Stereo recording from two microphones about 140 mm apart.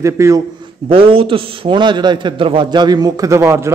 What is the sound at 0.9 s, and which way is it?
A man's voice, 40° right (ahead or behind).